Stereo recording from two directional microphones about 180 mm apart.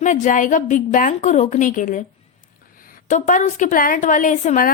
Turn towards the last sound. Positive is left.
turn(degrees=45)  # may be behind; listen again after turning